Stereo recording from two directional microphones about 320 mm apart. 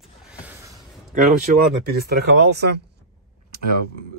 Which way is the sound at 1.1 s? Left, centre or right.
Right.